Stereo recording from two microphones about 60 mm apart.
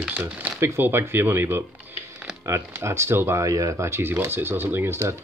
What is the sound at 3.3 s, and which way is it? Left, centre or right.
Speech, right.